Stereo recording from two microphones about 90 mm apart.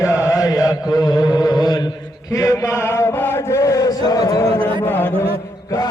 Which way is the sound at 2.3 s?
40° left (ahead or behind).